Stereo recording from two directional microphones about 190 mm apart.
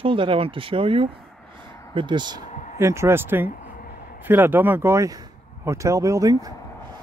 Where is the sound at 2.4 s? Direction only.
40° left (ahead or behind).